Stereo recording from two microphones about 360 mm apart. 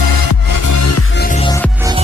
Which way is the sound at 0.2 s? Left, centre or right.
Left.